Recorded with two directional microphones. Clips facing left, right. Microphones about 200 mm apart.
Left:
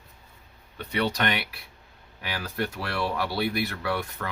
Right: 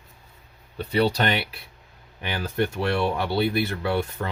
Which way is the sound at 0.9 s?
30° right (ahead or behind).